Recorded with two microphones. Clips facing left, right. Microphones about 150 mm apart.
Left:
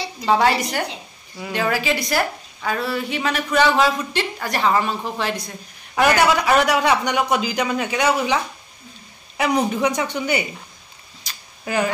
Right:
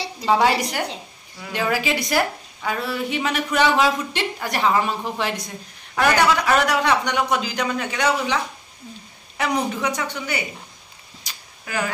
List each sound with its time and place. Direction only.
0.3 s a woman's voice: 10° right (ahead or behind)
5.9 s a man's voice: 5° left (ahead or behind)
9.8 s speech: 20° left (ahead or behind)
11.3 s a sound: 15° right (ahead or behind)
11.6 s speech: 25° left (ahead or behind)